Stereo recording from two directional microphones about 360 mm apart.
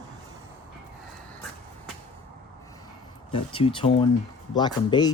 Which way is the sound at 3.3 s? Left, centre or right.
Centre.